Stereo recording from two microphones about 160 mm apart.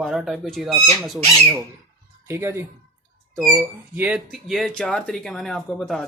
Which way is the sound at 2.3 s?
15° right (ahead or behind).